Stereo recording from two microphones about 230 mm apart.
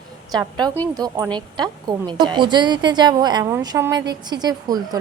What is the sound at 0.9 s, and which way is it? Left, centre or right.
Speech, centre.